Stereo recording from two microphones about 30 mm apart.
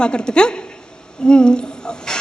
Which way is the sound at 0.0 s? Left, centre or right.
Left.